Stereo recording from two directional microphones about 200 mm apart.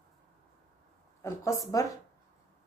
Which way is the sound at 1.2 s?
15° left (ahead or behind).